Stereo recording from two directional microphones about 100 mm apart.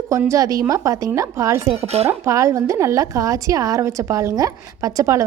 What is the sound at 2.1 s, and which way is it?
A woman's voice, 30° right (ahead or behind).